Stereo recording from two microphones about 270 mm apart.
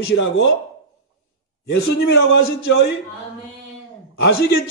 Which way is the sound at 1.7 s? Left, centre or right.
Left.